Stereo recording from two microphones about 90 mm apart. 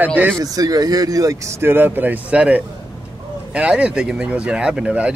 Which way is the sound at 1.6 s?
25° right (ahead or behind).